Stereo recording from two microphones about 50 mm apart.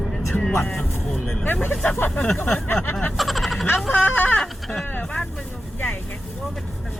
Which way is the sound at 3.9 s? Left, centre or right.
Left.